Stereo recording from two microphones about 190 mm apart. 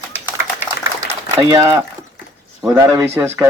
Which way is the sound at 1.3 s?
20° right (ahead or behind).